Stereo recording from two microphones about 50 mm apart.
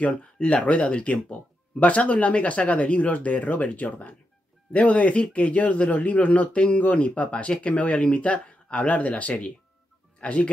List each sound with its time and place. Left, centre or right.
0.0 s speech: left